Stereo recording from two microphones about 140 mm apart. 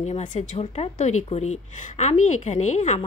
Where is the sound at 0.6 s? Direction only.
50° left (ahead or behind).